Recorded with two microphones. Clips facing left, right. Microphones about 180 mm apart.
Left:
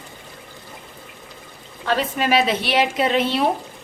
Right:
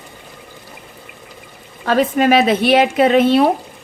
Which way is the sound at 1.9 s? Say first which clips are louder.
Right 7 dB; 50° right (ahead or behind).